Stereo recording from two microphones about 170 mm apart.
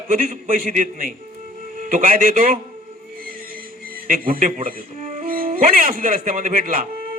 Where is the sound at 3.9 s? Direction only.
55° right (ahead or behind).